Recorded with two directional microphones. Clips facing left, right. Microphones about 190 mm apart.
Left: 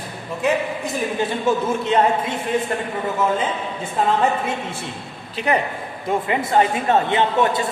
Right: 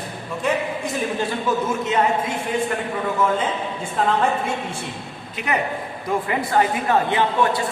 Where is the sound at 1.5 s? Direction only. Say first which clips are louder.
Left 3 dB; 30° left (ahead or behind).